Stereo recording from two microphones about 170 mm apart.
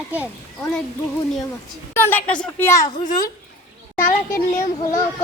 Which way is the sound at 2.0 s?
10° left (ahead or behind).